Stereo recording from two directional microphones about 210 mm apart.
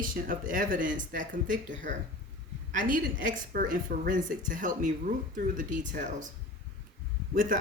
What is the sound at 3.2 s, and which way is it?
Speech, 40° right (ahead or behind).